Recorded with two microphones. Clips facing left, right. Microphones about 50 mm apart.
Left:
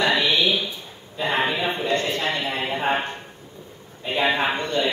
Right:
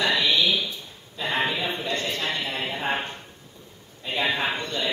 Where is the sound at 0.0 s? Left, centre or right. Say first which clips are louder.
Left 2 dB; centre.